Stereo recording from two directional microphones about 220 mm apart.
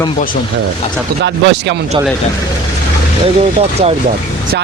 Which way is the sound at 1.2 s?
50° right (ahead or behind).